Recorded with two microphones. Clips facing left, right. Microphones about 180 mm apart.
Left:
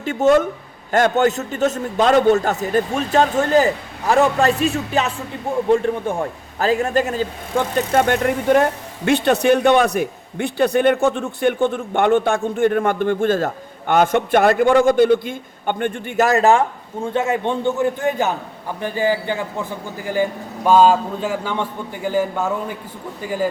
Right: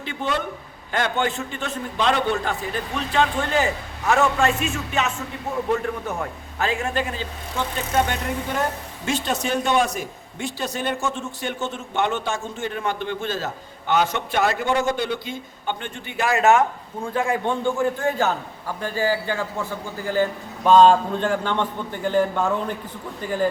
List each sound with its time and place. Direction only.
0.0 s a man's voice: 45° left (ahead or behind); by 19.5 s 20° left (ahead or behind)
20.7 s a man's voice: 5° left (ahead or behind)